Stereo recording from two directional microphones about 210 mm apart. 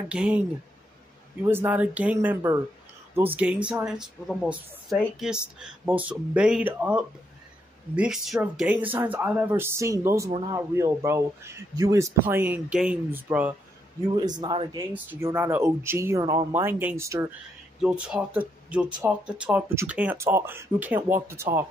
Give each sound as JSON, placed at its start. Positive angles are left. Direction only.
{"t": 0.1, "sound": "speech", "side_deg": -5}
{"t": 1.4, "sound": "a man's voice", "side_deg": -10}
{"t": 14.0, "sound": "speech", "side_deg": -20}
{"t": 15.0, "sound": "a man's voice", "side_deg": -10}